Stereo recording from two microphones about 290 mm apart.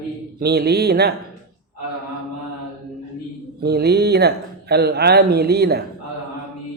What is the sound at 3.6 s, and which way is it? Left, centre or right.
Speech, right.